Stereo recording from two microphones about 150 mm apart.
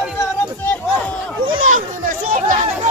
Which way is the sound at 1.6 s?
65° right (ahead or behind).